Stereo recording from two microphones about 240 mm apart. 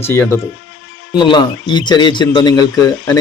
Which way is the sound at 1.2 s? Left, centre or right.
Centre.